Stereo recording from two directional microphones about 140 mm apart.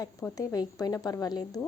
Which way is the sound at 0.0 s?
25° left (ahead or behind).